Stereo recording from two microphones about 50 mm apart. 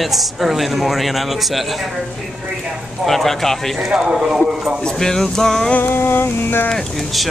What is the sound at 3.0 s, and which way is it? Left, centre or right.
Speech, centre.